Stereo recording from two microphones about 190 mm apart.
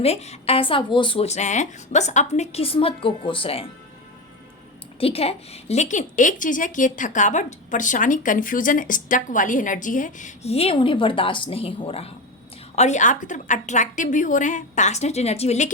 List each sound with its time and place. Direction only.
0.0 s a woman's voice: 35° left (ahead or behind)
4.9 s a woman's voice: 30° left (ahead or behind)